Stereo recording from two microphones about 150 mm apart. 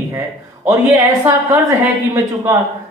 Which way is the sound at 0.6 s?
20° right (ahead or behind).